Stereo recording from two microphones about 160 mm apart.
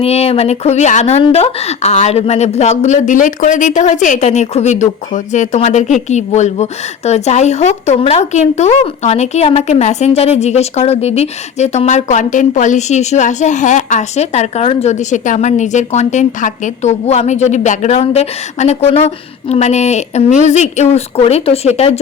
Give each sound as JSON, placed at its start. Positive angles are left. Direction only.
{"t": 0.0, "sound": "a woman's voice", "side_deg": 40}